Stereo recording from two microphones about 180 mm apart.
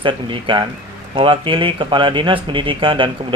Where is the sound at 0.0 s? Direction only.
25° right (ahead or behind).